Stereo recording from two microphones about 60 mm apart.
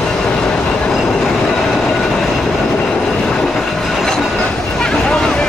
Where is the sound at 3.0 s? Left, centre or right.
Centre.